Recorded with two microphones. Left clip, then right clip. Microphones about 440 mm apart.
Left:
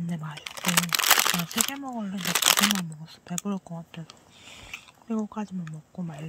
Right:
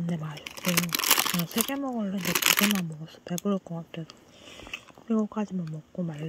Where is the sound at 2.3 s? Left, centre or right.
Centre.